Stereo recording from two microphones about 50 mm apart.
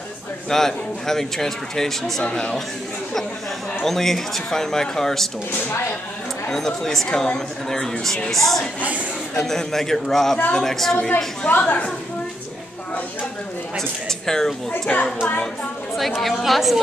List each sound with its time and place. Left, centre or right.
0.5 s a man's voice: centre
3.8 s a man's voice: centre
5.7 s speech: left
6.5 s a man's voice: centre
11.4 s a woman's voice: left
13.7 s a man's voice: centre
14.7 s a child's voice: left
16.0 s a woman's voice: centre